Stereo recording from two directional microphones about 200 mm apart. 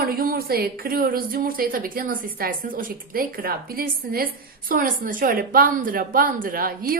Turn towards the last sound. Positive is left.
turn(degrees=-45)  # may be behind; listen again after turning